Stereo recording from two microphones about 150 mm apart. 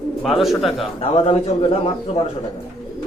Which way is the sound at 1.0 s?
40° left (ahead or behind).